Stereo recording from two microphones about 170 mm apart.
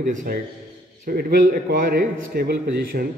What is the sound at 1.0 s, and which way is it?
Speech, 65° right (ahead or behind).